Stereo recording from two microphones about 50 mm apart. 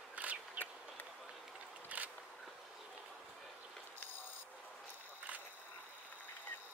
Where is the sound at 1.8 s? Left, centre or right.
Right.